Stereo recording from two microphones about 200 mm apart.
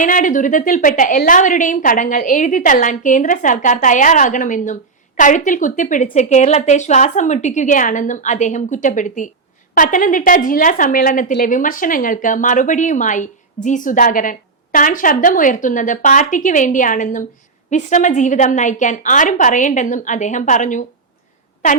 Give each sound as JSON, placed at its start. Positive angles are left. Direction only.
{"t": 0.0, "sound": "a woman's voice", "side_deg": 40}